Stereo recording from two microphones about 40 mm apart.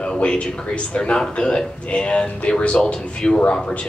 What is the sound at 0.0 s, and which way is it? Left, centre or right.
Speech, left.